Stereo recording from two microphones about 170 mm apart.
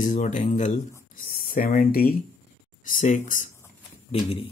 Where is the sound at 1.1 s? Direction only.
55° left (ahead or behind).